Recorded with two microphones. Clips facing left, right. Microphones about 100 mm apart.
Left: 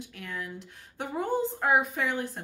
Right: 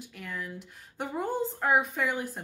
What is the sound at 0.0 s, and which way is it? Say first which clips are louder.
Speech: left 1 dB; centre (ahead or behind).